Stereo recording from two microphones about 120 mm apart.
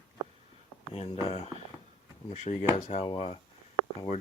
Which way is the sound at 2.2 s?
70° left (ahead or behind).